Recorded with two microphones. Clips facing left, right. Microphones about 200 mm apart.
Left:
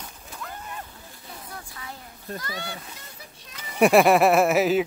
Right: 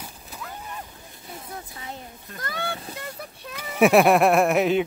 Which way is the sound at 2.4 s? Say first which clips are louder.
Right 4 dB; 55° right (ahead or behind).